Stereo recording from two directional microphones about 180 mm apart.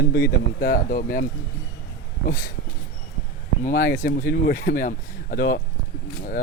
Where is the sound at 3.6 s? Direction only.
50° left (ahead or behind).